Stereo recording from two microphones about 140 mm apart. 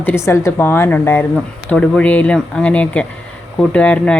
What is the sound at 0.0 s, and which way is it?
Speech, 15° left (ahead or behind).